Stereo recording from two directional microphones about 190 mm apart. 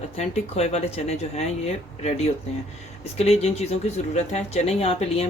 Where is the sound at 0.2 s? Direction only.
35° left (ahead or behind).